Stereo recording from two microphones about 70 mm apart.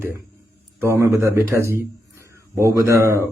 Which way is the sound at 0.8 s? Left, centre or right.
Right.